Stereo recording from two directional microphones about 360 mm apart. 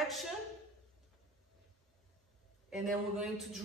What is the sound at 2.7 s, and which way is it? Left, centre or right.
Speech, centre.